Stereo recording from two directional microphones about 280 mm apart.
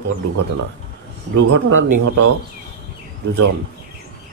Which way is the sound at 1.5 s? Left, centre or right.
Right.